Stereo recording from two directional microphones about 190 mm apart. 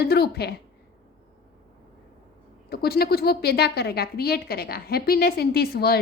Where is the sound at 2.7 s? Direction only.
55° left (ahead or behind).